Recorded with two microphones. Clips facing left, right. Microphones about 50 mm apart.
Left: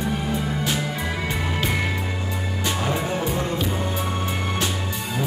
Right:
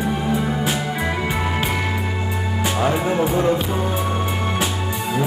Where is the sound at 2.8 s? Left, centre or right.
Centre.